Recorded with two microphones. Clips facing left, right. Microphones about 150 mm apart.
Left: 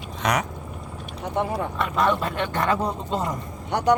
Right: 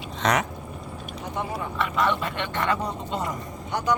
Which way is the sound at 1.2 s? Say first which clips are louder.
Left 6 dB; 60° left (ahead or behind).